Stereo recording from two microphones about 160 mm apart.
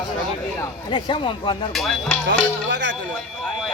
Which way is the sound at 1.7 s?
Centre (ahead or behind).